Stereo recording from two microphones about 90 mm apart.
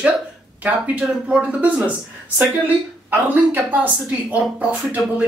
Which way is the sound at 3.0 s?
20° right (ahead or behind).